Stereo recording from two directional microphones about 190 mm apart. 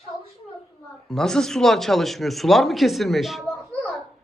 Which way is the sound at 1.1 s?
5° left (ahead or behind).